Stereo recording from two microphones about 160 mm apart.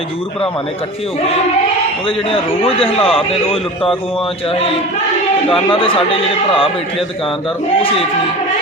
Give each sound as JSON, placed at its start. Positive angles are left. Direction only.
{"t": 2.0, "sound": "a man's voice", "side_deg": 35}
{"t": 5.5, "sound": "a man's voice", "side_deg": 35}